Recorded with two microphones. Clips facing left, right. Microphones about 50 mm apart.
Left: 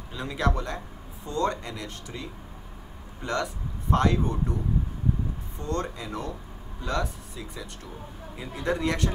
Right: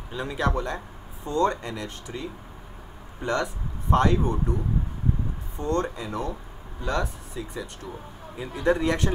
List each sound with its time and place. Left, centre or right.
0.1 s speech: centre
1.2 s speech: centre
5.6 s speech: centre
8.6 s speech: centre